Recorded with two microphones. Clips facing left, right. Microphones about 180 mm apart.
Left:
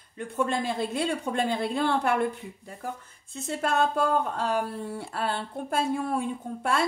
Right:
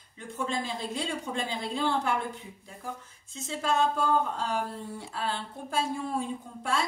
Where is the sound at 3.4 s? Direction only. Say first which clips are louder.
Left 2 dB; 60° left (ahead or behind).